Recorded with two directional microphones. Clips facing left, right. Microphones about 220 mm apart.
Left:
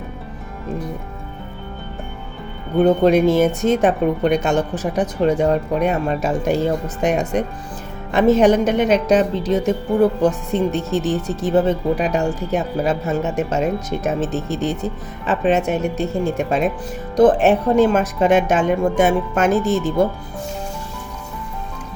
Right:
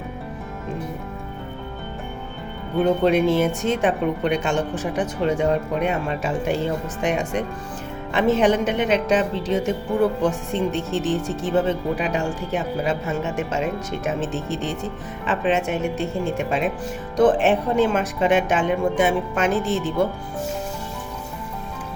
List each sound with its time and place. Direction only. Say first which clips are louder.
3.0 s a woman's voice: left 4 dB; 40° left (ahead or behind)